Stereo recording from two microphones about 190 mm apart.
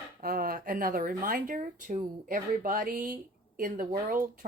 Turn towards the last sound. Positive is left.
turn(degrees=-45)  # may be behind; listen again after turning